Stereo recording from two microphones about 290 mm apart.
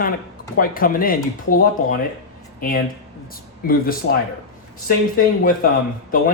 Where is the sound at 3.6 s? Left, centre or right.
Left.